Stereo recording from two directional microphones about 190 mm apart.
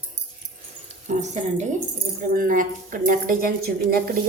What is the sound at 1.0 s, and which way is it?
A woman's voice, 40° right (ahead or behind).